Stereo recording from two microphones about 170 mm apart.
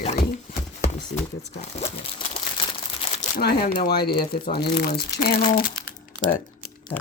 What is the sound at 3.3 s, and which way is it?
Speech, 60° left (ahead or behind).